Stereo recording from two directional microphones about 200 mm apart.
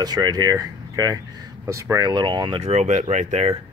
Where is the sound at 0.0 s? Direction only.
20° right (ahead or behind).